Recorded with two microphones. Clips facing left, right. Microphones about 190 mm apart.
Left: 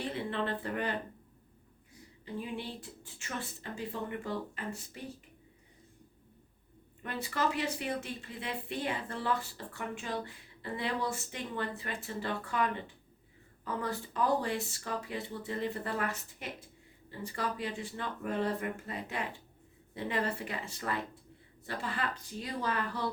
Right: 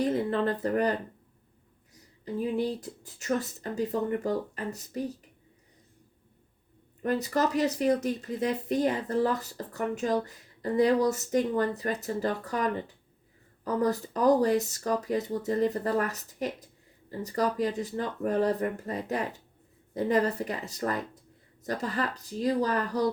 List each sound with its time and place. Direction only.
0.0 s speech: 40° right (ahead or behind)
7.0 s speech: 40° right (ahead or behind)